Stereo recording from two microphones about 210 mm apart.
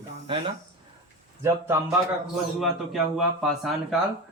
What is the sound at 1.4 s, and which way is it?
Speech, 10° right (ahead or behind).